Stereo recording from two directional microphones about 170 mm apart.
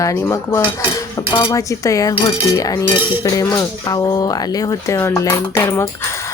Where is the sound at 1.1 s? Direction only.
25° left (ahead or behind).